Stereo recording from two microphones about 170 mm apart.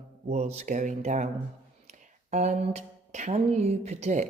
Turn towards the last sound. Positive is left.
turn(degrees=-45)  # may be behind; listen again after turning